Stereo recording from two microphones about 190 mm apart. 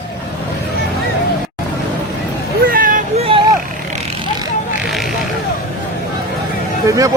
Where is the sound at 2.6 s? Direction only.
50° right (ahead or behind); by 3.4 s 30° right (ahead or behind).